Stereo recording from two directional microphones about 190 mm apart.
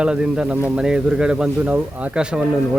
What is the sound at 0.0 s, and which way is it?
Speech, 5° right (ahead or behind).